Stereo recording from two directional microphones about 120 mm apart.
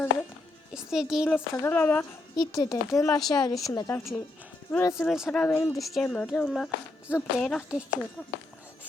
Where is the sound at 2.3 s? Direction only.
30° left (ahead or behind).